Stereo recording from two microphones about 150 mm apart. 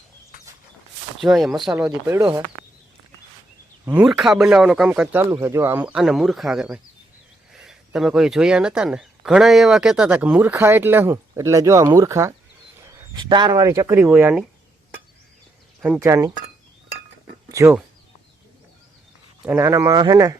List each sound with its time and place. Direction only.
1.2 s speech: centre (ahead or behind)
3.9 s speech: 5° right (ahead or behind); by 12.3 s 20° right (ahead or behind)
13.1 s speech: 30° right (ahead or behind); by 14.4 s 10° right (ahead or behind)
16.0 s speech: 20° right (ahead or behind)
17.5 s speech: 20° right (ahead or behind)
19.5 s speech: 15° right (ahead or behind)